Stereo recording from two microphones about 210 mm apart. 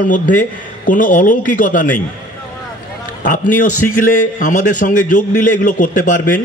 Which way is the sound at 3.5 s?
35° left (ahead or behind).